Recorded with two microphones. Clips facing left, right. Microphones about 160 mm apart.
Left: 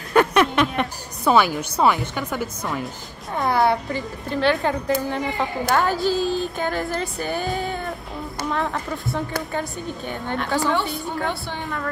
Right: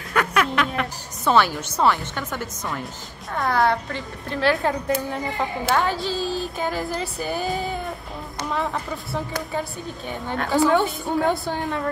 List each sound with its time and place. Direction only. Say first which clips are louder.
0.1 s speech: left 5 dB; 30° left (ahead or behind)
1.2 s speech: left 1 dB; 10° left (ahead or behind)
4.3 s a woman's voice: left 1 dB; centre (ahead or behind)
11.2 s a woman's voice: right 5 dB; 40° right (ahead or behind)